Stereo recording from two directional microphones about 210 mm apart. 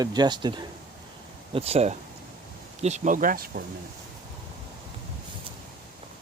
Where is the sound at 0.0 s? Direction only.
20° right (ahead or behind); by 3.6 s 45° right (ahead or behind).